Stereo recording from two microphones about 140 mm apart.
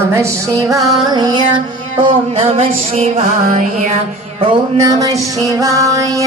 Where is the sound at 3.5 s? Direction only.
65° right (ahead or behind).